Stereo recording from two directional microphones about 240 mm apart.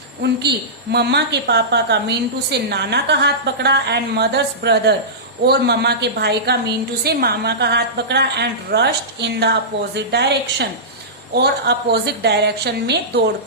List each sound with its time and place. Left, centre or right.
0.2 s a woman's voice: right